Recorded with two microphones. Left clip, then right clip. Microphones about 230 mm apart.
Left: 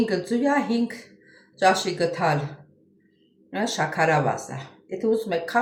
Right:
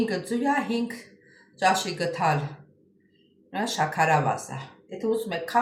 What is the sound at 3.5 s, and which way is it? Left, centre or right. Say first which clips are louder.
Speech: left 1 dB; centre.